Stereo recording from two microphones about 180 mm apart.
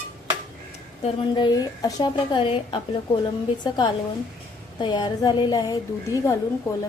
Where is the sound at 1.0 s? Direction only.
25° left (ahead or behind).